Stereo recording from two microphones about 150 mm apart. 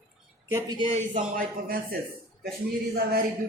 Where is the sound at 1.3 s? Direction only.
75° right (ahead or behind).